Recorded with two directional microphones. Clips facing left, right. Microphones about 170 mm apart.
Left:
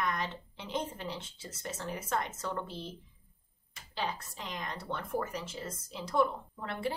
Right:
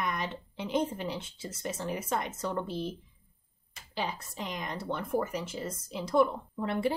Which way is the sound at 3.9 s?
15° right (ahead or behind).